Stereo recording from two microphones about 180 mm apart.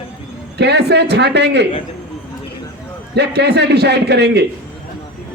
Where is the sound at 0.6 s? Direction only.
65° right (ahead or behind).